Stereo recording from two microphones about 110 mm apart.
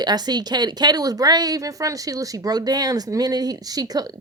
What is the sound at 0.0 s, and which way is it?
Speech, 40° right (ahead or behind).